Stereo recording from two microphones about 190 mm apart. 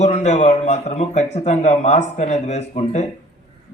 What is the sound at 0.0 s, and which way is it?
A man's voice, 35° left (ahead or behind).